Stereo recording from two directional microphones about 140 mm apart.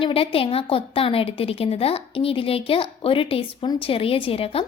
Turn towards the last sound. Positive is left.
turn(degrees=45)  # may be behind; listen again after turning